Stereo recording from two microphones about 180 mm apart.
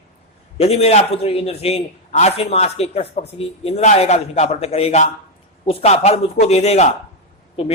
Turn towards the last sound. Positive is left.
turn(degrees=30)  # may be behind; listen again after turning